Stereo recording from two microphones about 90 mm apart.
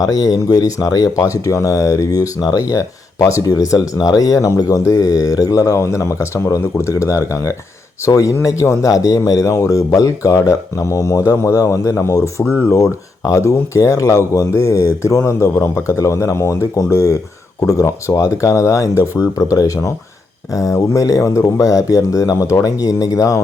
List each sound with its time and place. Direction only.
0.0 s speech: 40° left (ahead or behind)